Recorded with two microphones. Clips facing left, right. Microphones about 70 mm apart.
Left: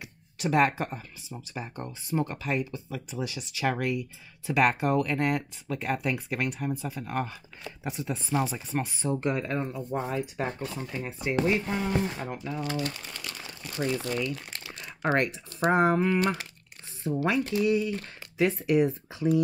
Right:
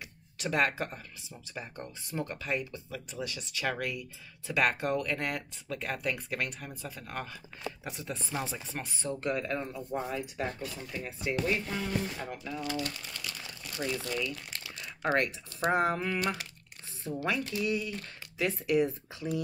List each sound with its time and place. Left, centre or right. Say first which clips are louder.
0.4 s speech: left 5 dB; centre